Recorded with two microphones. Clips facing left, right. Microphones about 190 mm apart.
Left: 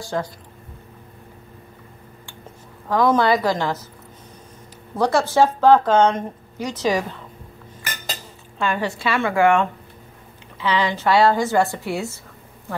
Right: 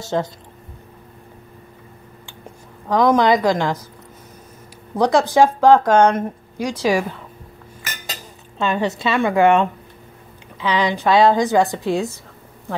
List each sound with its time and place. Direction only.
0.0 s a woman's voice: 25° right (ahead or behind)
2.9 s a woman's voice: 15° right (ahead or behind)
4.9 s a woman's voice: 15° right (ahead or behind)
8.5 s a woman's voice: 20° right (ahead or behind)